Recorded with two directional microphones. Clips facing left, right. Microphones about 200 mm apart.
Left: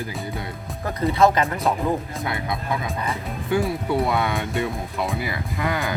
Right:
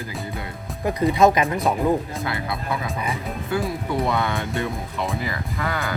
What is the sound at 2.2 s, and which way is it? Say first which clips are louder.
Speech: even; 20° left (ahead or behind).